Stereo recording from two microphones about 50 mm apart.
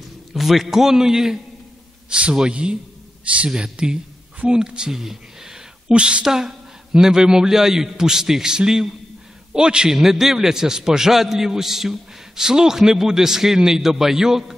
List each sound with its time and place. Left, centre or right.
0.3 s a man's voice: centre
5.9 s a man's voice: right
6.2 s a man's voice: centre